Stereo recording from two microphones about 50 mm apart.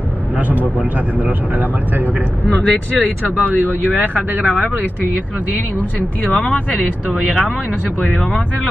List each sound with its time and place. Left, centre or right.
0.4 s speech: right
2.4 s speech: left
3.3 s speech: right
5.8 s speech: left